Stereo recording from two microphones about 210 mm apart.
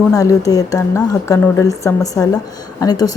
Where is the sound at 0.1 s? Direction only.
15° left (ahead or behind).